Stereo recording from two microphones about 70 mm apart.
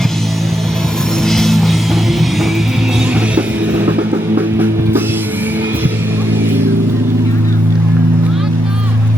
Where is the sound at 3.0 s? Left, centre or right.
Centre.